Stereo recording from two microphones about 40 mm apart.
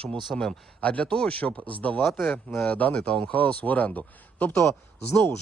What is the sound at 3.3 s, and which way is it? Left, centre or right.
Speech, left.